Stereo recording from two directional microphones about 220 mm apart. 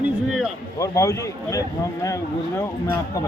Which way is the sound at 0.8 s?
15° left (ahead or behind).